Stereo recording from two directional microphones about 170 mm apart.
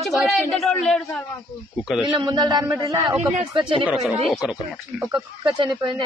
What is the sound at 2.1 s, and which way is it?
A woman's voice, 25° right (ahead or behind).